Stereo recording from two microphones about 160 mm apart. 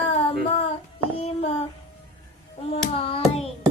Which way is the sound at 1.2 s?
40° left (ahead or behind).